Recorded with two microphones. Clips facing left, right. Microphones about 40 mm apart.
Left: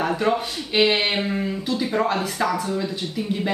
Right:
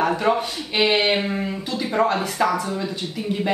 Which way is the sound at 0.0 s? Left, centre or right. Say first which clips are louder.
Right 2 dB; centre.